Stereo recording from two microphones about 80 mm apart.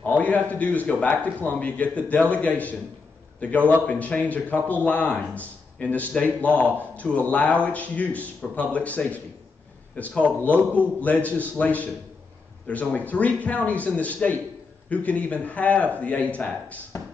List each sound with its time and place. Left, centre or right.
0.0 s a man's voice: centre